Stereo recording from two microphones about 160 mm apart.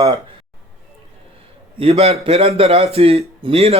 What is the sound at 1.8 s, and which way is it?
Speech, 40° right (ahead or behind).